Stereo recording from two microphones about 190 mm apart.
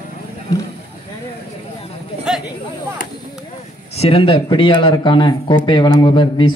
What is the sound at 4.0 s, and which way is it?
Speech, 30° left (ahead or behind).